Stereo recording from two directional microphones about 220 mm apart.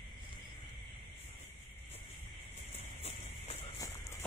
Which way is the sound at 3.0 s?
30° left (ahead or behind).